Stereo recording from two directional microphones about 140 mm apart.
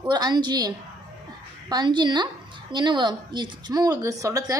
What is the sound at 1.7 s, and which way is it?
A woman's voice, 30° right (ahead or behind).